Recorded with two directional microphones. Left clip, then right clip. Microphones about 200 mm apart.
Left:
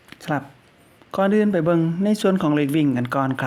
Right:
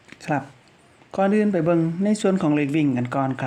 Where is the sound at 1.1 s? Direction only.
20° left (ahead or behind).